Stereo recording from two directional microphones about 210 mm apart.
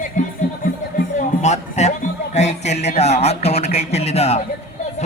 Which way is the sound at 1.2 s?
35° left (ahead or behind).